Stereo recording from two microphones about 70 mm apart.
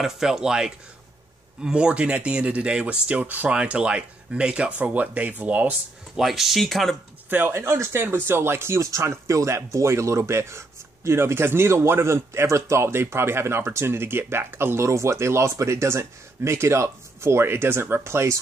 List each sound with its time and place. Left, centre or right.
0.0 s speech: centre
6.1 s speech: centre
7.2 s a man's voice: right